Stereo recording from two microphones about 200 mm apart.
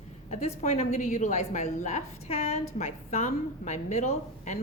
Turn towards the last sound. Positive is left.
turn(degrees=35)  # may be behind; listen again after turning